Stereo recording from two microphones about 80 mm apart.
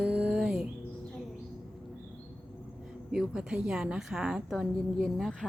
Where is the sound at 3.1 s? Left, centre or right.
Centre.